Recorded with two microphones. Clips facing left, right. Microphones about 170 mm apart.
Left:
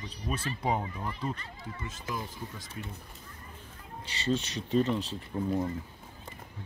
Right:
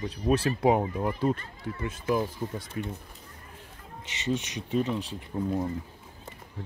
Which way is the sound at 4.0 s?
20° right (ahead or behind).